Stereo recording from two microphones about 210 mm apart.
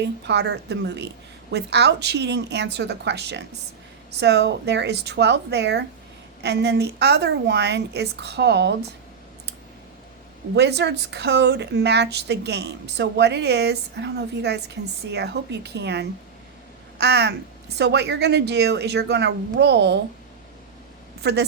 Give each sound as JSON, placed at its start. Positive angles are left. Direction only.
{"t": 0.0, "sound": "a woman's voice", "side_deg": -55}
{"t": 10.5, "sound": "a woman's voice", "side_deg": -55}